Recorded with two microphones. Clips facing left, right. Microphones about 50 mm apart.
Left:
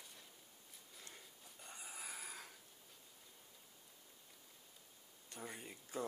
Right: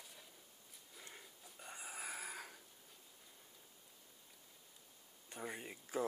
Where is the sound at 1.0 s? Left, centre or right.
Centre.